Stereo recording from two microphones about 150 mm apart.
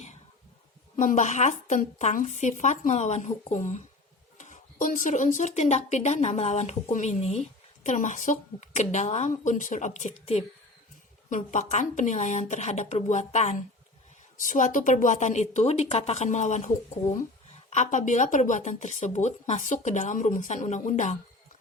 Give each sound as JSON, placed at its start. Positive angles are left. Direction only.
{"t": 0.9, "sound": "speech", "side_deg": 55}